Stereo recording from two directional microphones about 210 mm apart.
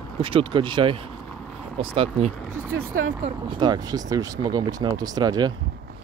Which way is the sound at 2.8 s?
75° right (ahead or behind).